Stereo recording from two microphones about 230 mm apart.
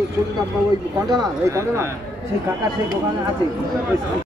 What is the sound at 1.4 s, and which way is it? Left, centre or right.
Speech, centre.